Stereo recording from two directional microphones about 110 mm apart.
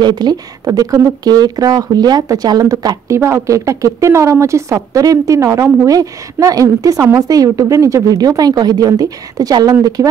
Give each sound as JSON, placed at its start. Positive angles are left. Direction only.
{"t": 0.0, "sound": "speech", "side_deg": -40}